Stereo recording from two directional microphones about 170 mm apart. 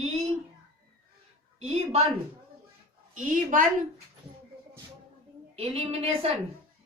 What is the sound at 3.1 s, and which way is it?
Speech, 50° right (ahead or behind).